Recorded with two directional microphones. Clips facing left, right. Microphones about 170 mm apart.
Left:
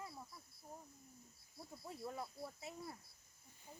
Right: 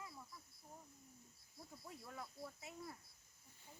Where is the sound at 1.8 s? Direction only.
30° left (ahead or behind).